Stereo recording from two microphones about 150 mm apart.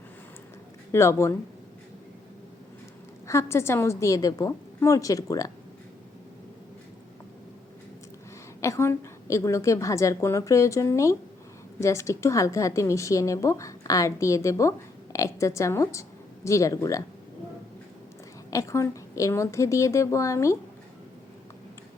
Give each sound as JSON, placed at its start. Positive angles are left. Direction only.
{"t": 0.9, "sound": "a woman's voice", "side_deg": 20}
{"t": 3.2, "sound": "a woman's voice", "side_deg": 20}
{"t": 8.6, "sound": "a woman's voice", "side_deg": 20}
{"t": 18.5, "sound": "a woman's voice", "side_deg": 20}